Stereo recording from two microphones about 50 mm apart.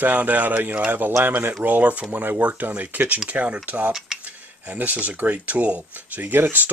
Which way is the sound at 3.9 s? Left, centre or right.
Centre.